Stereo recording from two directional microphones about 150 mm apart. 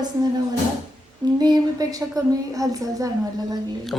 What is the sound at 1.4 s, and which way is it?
A woman's voice, 25° right (ahead or behind).